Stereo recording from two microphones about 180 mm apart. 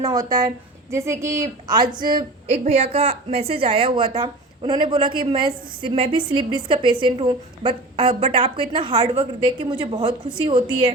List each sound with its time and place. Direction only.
0.0 s a woman's voice: 20° right (ahead or behind)
2.5 s a woman's voice: 35° right (ahead or behind)